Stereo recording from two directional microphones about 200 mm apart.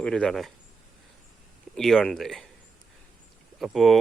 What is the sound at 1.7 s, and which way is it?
Speech, centre (ahead or behind).